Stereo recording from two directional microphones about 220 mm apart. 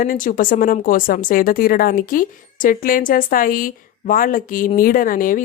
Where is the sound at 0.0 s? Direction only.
40° left (ahead or behind).